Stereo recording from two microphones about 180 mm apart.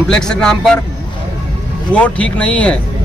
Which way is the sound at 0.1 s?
5° left (ahead or behind).